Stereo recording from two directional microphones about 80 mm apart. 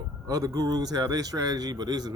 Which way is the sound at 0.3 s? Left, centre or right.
Right.